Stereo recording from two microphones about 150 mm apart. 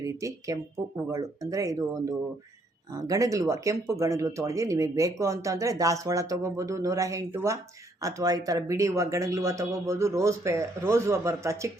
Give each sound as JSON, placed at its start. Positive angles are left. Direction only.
{"t": 0.0, "sound": "speech", "side_deg": -20}